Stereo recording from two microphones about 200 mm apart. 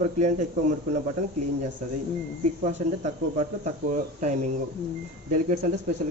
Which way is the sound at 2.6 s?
35° right (ahead or behind).